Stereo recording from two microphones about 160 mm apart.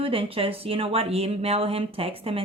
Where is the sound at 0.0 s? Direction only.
35° right (ahead or behind).